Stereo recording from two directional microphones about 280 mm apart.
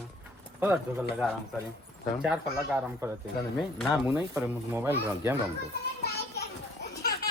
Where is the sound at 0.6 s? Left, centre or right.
Centre.